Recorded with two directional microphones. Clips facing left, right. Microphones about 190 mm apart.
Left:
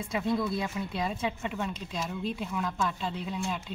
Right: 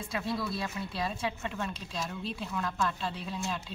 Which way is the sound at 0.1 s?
20° left (ahead or behind).